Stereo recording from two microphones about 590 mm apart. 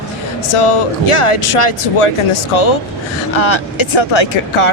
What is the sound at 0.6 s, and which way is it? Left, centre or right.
Speech, left.